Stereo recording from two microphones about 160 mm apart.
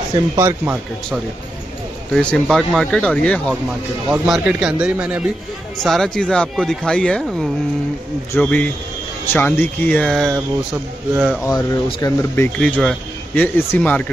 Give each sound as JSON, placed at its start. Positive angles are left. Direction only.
{"t": 0.4, "sound": "speech", "side_deg": -15}
{"t": 2.1, "sound": "speech", "side_deg": 5}
{"t": 4.3, "sound": "speech", "side_deg": -5}
{"t": 11.4, "sound": "speech", "side_deg": 20}